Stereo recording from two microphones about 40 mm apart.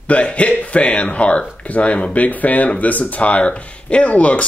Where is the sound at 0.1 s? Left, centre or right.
Left.